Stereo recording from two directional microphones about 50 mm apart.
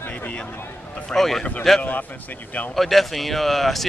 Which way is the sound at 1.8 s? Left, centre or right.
Left.